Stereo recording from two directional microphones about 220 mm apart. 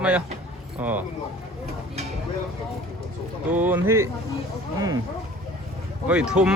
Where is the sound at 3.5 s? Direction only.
10° right (ahead or behind).